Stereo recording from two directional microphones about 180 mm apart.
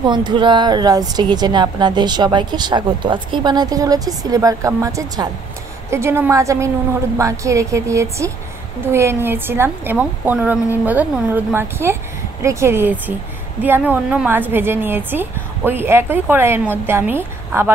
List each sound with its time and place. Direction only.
0.0 s a woman's voice: 25° right (ahead or behind)